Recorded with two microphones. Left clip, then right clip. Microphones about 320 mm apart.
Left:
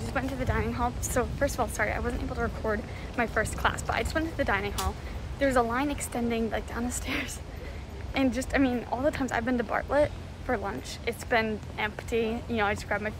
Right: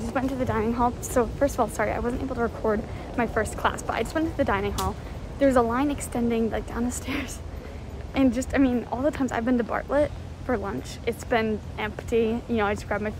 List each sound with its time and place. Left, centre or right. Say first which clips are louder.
0.0 s a woman's voice: right 4 dB; centre